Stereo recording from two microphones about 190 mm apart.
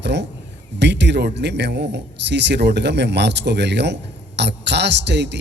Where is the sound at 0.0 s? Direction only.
65° right (ahead or behind).